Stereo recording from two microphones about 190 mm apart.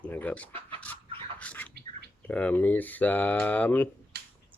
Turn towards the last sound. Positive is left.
turn(degrees=-55)  # may be behind; listen again after turning